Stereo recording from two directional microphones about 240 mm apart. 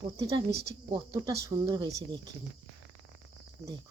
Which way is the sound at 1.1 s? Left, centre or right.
Centre.